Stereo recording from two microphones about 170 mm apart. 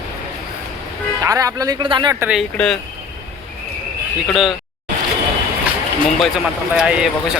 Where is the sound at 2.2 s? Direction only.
5° right (ahead or behind).